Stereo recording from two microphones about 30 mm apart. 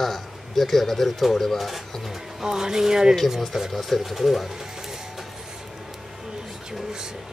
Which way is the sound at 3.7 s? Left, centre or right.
Centre.